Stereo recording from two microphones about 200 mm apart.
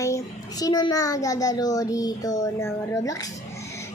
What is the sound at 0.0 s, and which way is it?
A child's voice, 15° left (ahead or behind).